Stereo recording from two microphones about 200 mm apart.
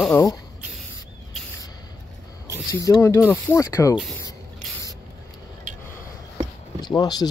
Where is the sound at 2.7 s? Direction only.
15° left (ahead or behind).